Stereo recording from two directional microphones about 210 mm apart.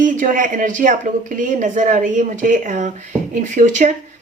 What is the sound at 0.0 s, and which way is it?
Speech, 40° right (ahead or behind).